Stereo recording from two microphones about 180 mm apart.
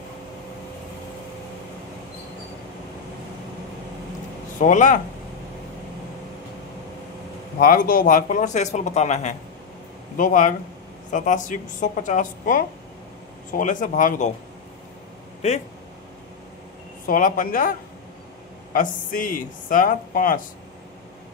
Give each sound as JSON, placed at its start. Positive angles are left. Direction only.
{"t": 4.6, "sound": "speech", "side_deg": 45}
{"t": 7.5, "sound": "speech", "side_deg": 55}
{"t": 17.0, "sound": "speech", "side_deg": 50}